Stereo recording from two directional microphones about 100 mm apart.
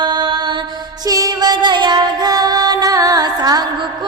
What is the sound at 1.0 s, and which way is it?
Music, 35° right (ahead or behind).